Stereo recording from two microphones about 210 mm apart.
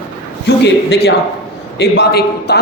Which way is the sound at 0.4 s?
55° left (ahead or behind).